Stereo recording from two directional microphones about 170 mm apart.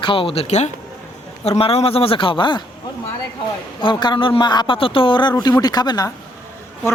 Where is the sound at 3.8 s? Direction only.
25° left (ahead or behind).